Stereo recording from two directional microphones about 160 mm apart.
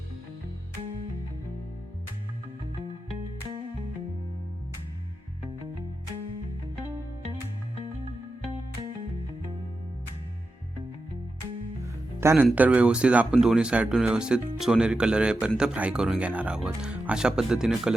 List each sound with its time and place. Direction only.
12.2 s speech: 15° right (ahead or behind)